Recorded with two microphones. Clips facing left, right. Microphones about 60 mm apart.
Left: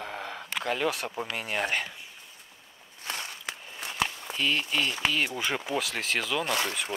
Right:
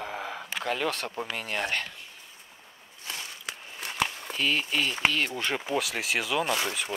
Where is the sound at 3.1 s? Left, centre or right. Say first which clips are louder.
Left 2 dB; left.